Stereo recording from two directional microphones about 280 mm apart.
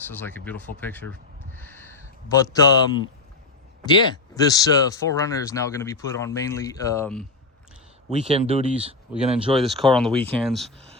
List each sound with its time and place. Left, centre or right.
0.1 s speech: centre
1.5 s a sound: centre
3.8 s speech: centre
8.1 s speech: right
9.1 s speech: centre